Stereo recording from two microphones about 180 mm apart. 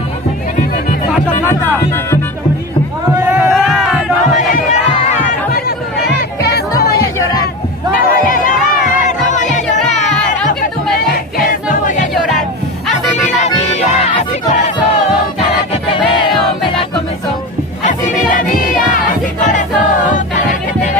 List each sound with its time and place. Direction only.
3.2 s a sound: 10° right (ahead or behind)
3.5 s crowd: centre (ahead or behind)
4.4 s crowd: 45° left (ahead or behind)
6.0 s a sound: 65° left (ahead or behind)
8.0 s crowd: 50° left (ahead or behind)
8.8 s music: 45° left (ahead or behind)
11.3 s choir: 45° left (ahead or behind)
12.3 s music: centre (ahead or behind)
12.9 s music: 35° left (ahead or behind)
15.9 s music: 30° left (ahead or behind)
19.4 s music: 45° left (ahead or behind)